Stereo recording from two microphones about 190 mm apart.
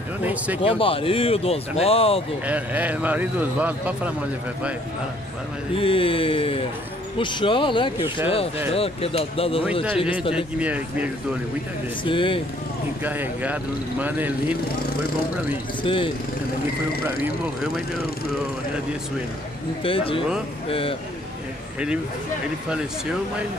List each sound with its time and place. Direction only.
0.2 s a man's voice: 10° right (ahead or behind)
0.6 s speech: 30° left (ahead or behind)
2.4 s a man's voice: 5° right (ahead or behind)
5.8 s speech: 30° left (ahead or behind)
10.3 s a man's voice: 5° right (ahead or behind)
12.0 s speech: 25° left (ahead or behind)
13.0 s a man's voice: 10° right (ahead or behind)
15.8 s speech: 25° left (ahead or behind)
19.8 s speech: 30° left (ahead or behind)